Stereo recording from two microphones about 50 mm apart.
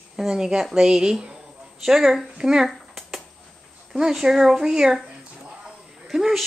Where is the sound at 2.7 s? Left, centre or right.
Centre.